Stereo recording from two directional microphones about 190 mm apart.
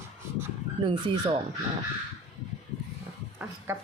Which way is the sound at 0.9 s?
25° right (ahead or behind).